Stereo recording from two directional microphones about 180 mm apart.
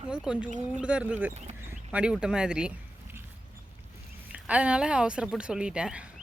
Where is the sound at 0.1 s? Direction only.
5° right (ahead or behind).